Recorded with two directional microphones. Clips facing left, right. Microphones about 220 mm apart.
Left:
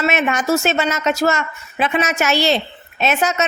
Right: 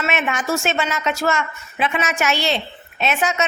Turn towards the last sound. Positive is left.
turn(degrees=40)  # may be behind; listen again after turning